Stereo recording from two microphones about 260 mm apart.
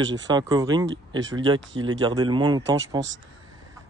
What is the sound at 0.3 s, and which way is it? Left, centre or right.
Speech, centre.